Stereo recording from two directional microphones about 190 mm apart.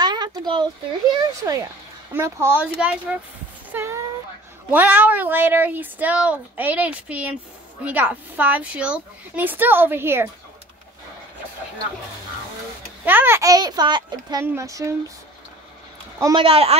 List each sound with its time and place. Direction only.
0.0 s a sound: 20° right (ahead or behind)
1.2 s a child's voice: 20° right (ahead or behind)
13.0 s a child's voice: 10° right (ahead or behind)
16.2 s speech: 20° right (ahead or behind)
16.4 s a child's voice: 30° right (ahead or behind)